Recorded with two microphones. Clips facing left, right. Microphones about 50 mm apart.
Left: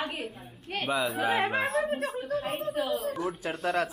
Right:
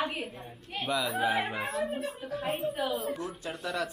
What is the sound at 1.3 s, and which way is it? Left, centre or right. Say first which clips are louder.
Speech: left 4 dB; left.